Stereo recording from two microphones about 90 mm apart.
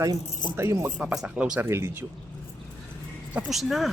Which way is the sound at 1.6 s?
30° right (ahead or behind).